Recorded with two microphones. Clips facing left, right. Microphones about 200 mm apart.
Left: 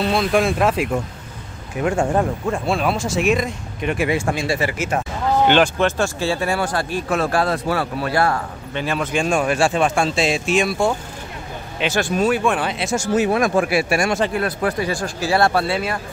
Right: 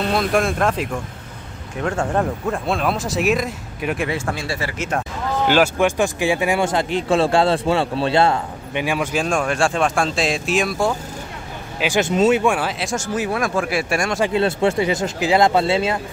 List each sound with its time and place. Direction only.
0.0 s speech: centre (ahead or behind)
2.4 s speech: centre (ahead or behind)
4.1 s speech: 15° left (ahead or behind)
5.5 s speech: 10° right (ahead or behind)
12.0 s speech: 20° right (ahead or behind)
12.4 s speech: 5° right (ahead or behind)
13.1 s speech: 25° left (ahead or behind)
13.7 s speech: 5° left (ahead or behind)
14.3 s speech: 25° right (ahead or behind)